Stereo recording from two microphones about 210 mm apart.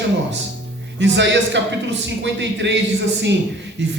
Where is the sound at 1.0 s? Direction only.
60° right (ahead or behind).